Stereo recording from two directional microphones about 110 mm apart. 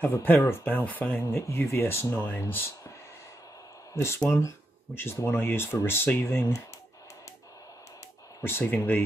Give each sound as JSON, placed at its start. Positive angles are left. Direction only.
{"t": 0.0, "sound": "speech", "side_deg": 15}
{"t": 3.9, "sound": "speech", "side_deg": 25}
{"t": 8.4, "sound": "speech", "side_deg": 20}